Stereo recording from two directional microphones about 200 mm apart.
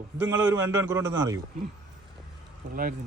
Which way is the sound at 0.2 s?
10° right (ahead or behind).